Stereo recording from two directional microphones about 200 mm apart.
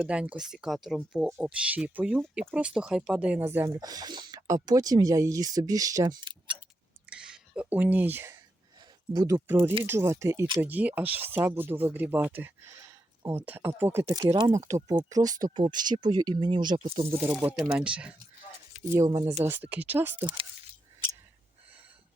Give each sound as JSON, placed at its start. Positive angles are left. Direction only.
{"t": 0.0, "sound": "speech", "side_deg": -5}
{"t": 7.1, "sound": "a sound", "side_deg": -5}
{"t": 9.1, "sound": "speech", "side_deg": -15}
{"t": 17.2, "sound": "speech", "side_deg": -10}
{"t": 18.9, "sound": "speech", "side_deg": -15}
{"t": 20.2, "sound": "speech", "side_deg": -25}